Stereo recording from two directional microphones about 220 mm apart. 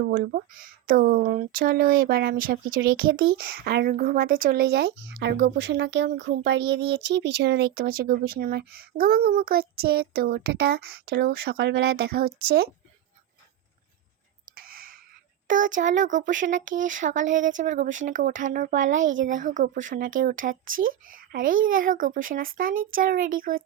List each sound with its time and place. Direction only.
0.0 s speech: 40° right (ahead or behind)
14.5 s whispering: 40° right (ahead or behind)
15.4 s a child's voice: 35° right (ahead or behind)